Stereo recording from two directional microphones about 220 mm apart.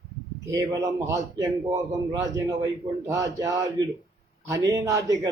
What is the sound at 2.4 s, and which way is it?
A man's voice, 15° right (ahead or behind).